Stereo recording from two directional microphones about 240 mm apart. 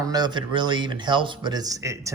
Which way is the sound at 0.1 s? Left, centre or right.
Centre.